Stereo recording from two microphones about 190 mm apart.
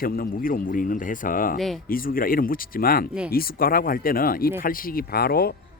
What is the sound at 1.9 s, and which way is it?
Speech, 50° left (ahead or behind).